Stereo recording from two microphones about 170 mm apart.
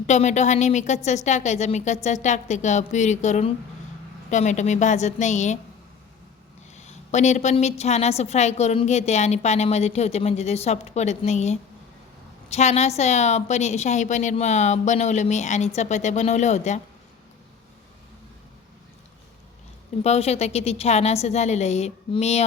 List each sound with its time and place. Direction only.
0.1 s a woman's voice: 40° left (ahead or behind)
6.7 s a woman's voice: 45° left (ahead or behind)
20.1 s a woman's voice: 40° left (ahead or behind)